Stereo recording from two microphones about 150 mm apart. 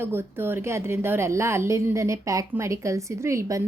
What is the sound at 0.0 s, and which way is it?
A woman's voice, 15° right (ahead or behind).